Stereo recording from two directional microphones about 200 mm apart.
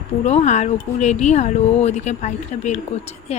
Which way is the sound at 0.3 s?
35° left (ahead or behind).